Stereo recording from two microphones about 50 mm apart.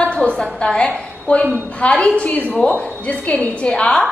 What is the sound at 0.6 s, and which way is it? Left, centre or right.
A woman's voice, centre.